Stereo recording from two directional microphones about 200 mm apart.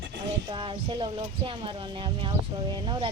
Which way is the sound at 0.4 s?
25° right (ahead or behind).